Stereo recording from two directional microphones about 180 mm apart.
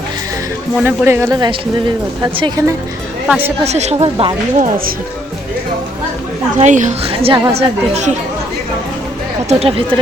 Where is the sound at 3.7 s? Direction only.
40° right (ahead or behind).